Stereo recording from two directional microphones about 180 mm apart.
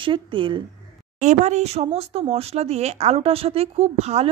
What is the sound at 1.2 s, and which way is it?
A woman's voice, 40° right (ahead or behind).